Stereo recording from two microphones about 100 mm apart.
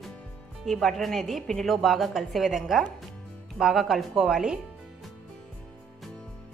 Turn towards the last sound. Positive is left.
turn(degrees=-5)  # may be behind; listen again after turning